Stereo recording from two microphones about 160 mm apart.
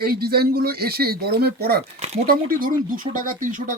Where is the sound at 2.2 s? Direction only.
60° right (ahead or behind).